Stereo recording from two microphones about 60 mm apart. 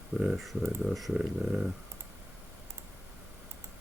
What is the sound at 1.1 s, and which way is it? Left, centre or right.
Speech, centre.